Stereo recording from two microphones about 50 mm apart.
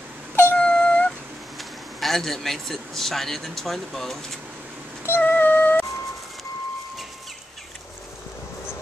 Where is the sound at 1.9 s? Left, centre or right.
Centre.